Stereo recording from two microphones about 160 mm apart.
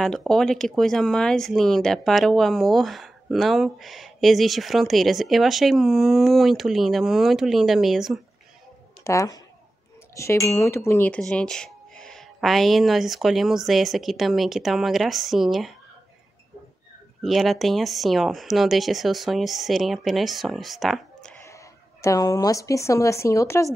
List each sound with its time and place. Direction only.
0.0 s speech: 5° left (ahead or behind)
9.0 s speech: 20° left (ahead or behind); by 15.7 s centre (ahead or behind)
17.2 s speech: centre (ahead or behind)
21.5 s a woman's voice: 20° left (ahead or behind)